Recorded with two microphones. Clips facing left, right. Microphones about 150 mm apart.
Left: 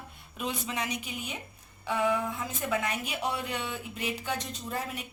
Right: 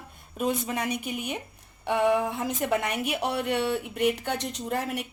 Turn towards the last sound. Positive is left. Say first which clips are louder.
# right 6 dB
turn(degrees=-70)  # may be behind; listen again after turning